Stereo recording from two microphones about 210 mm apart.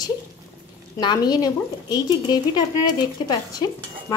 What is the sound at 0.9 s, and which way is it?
A woman's voice, 20° left (ahead or behind).